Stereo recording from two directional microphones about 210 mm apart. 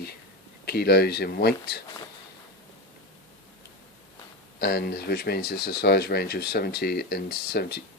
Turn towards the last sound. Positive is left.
turn(degrees=50)  # may be behind; listen again after turning